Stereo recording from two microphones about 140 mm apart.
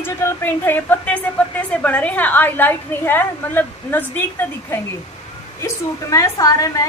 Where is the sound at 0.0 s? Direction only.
15° left (ahead or behind).